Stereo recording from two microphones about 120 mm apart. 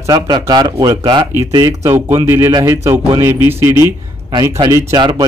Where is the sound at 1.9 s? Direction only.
20° right (ahead or behind).